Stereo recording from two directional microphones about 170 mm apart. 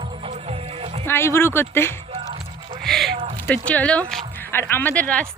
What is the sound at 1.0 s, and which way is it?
Speech, 15° left (ahead or behind).